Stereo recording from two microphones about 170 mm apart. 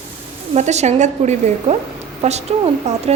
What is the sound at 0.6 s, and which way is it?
A woman's voice, 40° right (ahead or behind).